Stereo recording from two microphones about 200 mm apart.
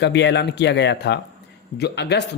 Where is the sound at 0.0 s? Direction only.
60° left (ahead or behind).